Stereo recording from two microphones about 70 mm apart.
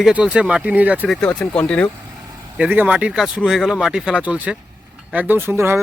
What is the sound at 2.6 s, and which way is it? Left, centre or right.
Speech, right.